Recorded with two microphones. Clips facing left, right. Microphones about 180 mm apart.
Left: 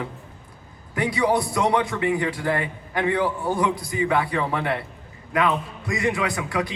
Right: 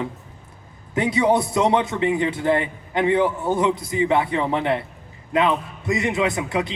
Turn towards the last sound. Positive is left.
turn(degrees=-20)  # may be behind; listen again after turning